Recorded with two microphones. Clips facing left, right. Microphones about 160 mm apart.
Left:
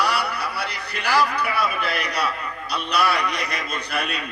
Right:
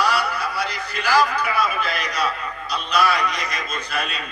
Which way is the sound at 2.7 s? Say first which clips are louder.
Right 1 dB; 65° left (ahead or behind).